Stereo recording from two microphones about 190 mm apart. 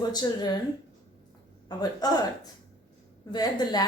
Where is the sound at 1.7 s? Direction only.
20° left (ahead or behind).